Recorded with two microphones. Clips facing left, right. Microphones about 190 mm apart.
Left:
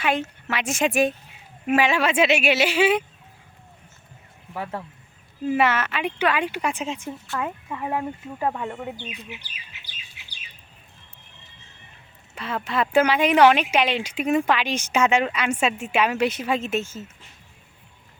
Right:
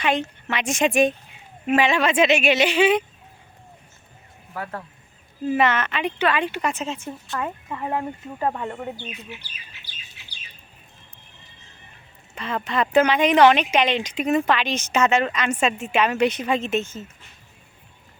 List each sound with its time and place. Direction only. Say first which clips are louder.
0.0 s speech: right 1 dB; 5° left (ahead or behind)
4.5 s speech: left 1 dB; 25° left (ahead or behind)
5.5 s speech: right 1 dB; 10° left (ahead or behind)
9.0 s speech: right 1 dB; 15° left (ahead or behind)
12.3 s speech: right 1 dB; 5° left (ahead or behind)